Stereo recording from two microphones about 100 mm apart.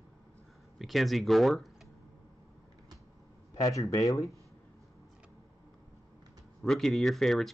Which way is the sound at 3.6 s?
35° left (ahead or behind).